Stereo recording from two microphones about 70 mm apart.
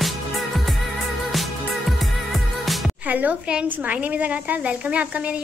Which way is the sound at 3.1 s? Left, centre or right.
Right.